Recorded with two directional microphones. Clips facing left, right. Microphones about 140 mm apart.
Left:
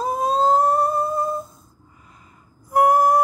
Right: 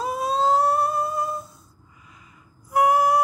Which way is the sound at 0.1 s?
45° left (ahead or behind).